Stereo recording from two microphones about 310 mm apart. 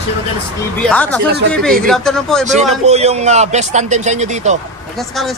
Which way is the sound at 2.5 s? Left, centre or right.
Right.